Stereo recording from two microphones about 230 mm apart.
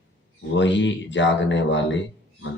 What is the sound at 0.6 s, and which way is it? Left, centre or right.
Speech, left.